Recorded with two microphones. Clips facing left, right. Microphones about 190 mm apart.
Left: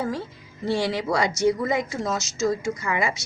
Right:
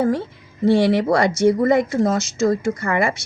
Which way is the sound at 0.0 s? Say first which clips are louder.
Right 8 dB; 55° right (ahead or behind).